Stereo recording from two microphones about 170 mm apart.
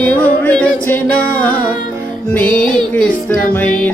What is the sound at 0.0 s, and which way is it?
Music, 10° left (ahead or behind).